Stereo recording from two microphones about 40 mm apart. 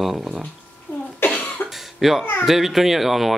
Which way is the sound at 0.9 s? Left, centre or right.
Left.